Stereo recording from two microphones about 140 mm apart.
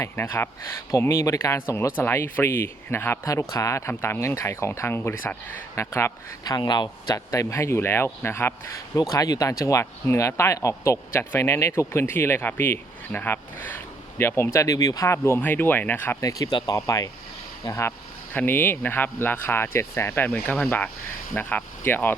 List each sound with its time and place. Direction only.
0.0 s speech: 15° left (ahead or behind)
9.0 s speech: 25° left (ahead or behind)
16.2 s speech: 30° left (ahead or behind)